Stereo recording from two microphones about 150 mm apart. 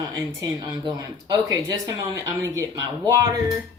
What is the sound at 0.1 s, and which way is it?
Speech, 20° right (ahead or behind).